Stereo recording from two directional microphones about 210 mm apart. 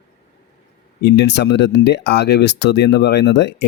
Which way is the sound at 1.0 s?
55° left (ahead or behind).